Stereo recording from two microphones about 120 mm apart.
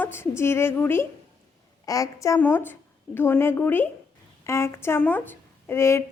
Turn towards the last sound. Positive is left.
turn(degrees=25)  # may be behind; listen again after turning